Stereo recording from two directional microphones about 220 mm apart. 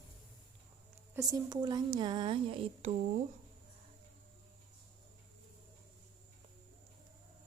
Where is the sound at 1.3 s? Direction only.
20° right (ahead or behind).